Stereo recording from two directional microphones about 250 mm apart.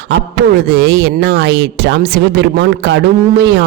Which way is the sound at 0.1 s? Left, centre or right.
Right.